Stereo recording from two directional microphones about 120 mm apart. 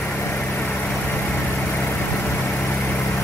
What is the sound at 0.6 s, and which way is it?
Vehicle, 15° left (ahead or behind).